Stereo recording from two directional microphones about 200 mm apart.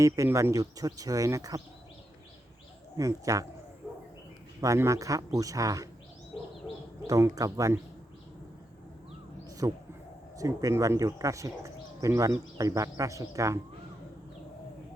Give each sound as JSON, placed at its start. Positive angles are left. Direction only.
{"t": 0.0, "sound": "speech", "side_deg": -15}
{"t": 3.0, "sound": "speech", "side_deg": -15}
{"t": 4.6, "sound": "speech", "side_deg": -15}
{"t": 7.1, "sound": "speech", "side_deg": -15}
{"t": 9.6, "sound": "speech", "side_deg": -20}